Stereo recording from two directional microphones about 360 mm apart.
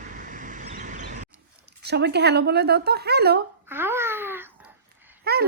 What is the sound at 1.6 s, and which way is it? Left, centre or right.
Speech, right.